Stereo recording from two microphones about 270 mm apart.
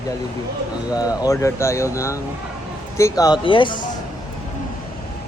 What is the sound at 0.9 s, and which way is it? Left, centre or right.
Speech, centre.